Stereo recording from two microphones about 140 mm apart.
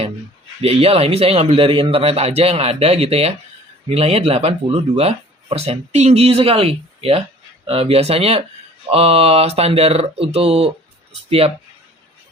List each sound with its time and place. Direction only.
0.6 s speech: 45° right (ahead or behind)